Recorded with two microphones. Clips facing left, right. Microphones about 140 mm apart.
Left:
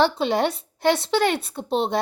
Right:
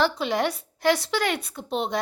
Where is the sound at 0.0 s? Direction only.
30° left (ahead or behind).